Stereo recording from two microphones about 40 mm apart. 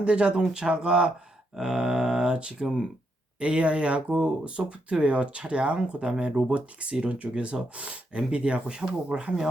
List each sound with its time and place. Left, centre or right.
0.0 s speech: right